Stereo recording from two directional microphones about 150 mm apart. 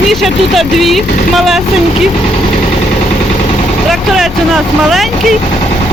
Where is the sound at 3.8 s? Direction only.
Centre (ahead or behind).